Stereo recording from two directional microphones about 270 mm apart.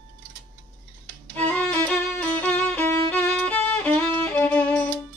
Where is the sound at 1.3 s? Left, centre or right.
Centre.